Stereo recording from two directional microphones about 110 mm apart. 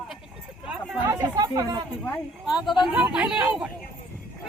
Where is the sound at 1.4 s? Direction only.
35° right (ahead or behind).